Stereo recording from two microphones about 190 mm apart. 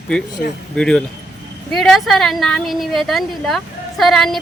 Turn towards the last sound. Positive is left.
turn(degrees=0)  # may be behind; listen again after turning